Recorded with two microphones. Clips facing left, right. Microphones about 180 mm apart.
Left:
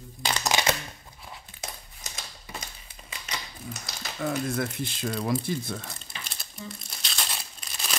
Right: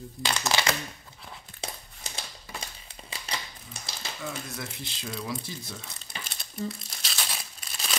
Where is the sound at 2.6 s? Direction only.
30° right (ahead or behind).